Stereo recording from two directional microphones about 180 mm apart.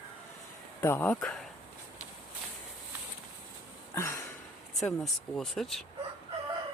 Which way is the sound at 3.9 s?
15° left (ahead or behind).